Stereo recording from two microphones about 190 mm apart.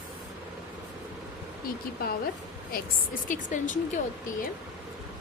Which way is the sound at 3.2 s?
40° left (ahead or behind).